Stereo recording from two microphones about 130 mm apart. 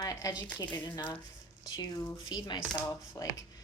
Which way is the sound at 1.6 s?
30° left (ahead or behind).